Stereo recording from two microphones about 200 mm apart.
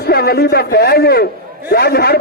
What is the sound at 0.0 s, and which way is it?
A man's voice, 50° left (ahead or behind).